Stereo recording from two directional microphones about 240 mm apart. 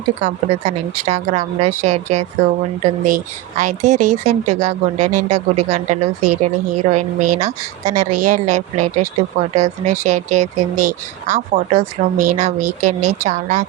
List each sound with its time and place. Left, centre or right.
0.2 s speech: right